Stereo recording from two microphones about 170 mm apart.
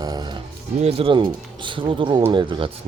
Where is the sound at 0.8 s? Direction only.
35° right (ahead or behind).